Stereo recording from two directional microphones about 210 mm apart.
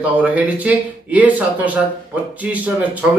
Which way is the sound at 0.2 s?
5° right (ahead or behind).